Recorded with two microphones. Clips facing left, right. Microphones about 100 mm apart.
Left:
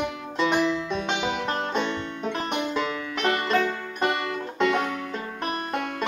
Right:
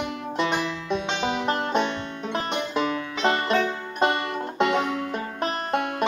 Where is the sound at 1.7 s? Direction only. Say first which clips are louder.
Right 2 dB; 20° right (ahead or behind).